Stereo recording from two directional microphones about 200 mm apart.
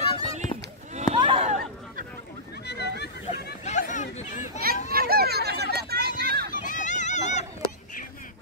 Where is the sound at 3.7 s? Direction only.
35° left (ahead or behind).